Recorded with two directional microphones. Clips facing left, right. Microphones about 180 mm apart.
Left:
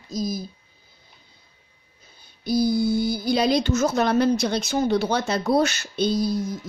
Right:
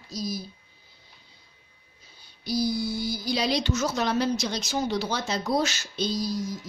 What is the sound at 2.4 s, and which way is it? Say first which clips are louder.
A woman's voice: left 6 dB; 50° left (ahead or behind).